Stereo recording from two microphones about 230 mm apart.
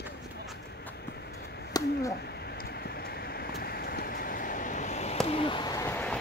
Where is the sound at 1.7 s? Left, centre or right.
Centre.